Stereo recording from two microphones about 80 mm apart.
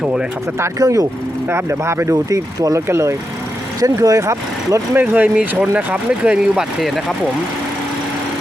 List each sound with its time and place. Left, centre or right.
0.0 s speech: centre
0.8 s speech: right
1.5 s speech: right
2.3 s speech: right
2.8 s speech: right
3.8 s speech: right
4.9 s speech: right; by 7.0 s centre